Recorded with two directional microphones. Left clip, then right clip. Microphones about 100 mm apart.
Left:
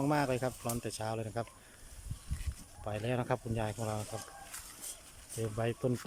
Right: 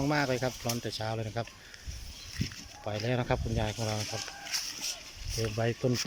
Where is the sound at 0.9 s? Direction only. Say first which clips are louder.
Right 3 dB; 15° left (ahead or behind).